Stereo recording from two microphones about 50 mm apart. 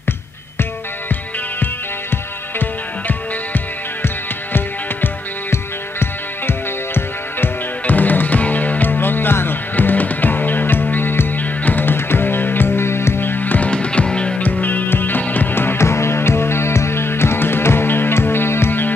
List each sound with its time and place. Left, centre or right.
2.6 s music: left
7.8 s music: left
13.7 s music: left
14.4 s music: left
15.5 s music: left
15.8 s music: left